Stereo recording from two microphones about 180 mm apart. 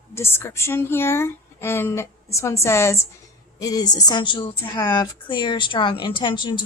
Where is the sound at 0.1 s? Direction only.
15° left (ahead or behind).